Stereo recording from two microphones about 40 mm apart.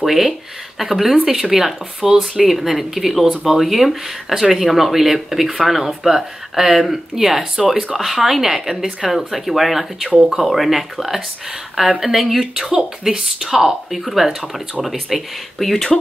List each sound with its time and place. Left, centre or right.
0.0 s speech: centre
2.3 s speech: centre
12.5 s speech: right
13.0 s speech: centre
15.6 s speech: centre